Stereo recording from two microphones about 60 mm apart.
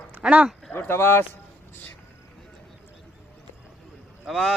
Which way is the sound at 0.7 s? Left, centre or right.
Left.